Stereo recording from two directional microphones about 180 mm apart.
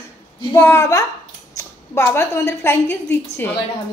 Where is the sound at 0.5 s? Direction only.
15° left (ahead or behind).